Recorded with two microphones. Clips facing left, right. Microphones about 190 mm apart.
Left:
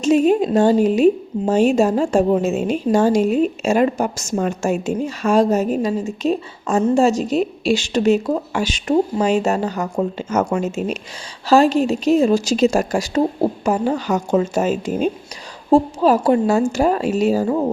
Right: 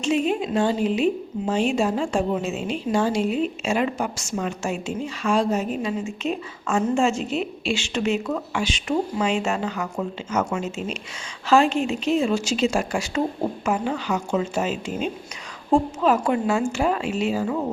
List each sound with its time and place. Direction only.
0.0 s a woman's voice: 40° left (ahead or behind)